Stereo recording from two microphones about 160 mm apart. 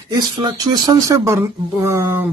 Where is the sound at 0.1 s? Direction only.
25° right (ahead or behind).